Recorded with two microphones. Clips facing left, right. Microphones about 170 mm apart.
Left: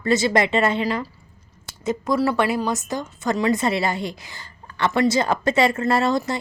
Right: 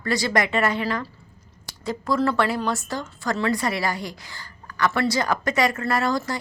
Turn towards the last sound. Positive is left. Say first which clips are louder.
# left 3 dB
turn(degrees=25)  # may be behind; listen again after turning